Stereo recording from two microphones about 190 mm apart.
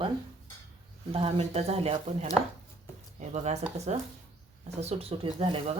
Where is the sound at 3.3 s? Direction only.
35° right (ahead or behind).